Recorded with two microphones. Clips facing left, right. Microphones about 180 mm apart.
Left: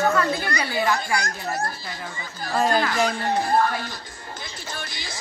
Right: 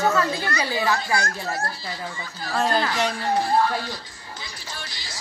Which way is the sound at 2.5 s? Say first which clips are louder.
Left 1 dB; 5° left (ahead or behind).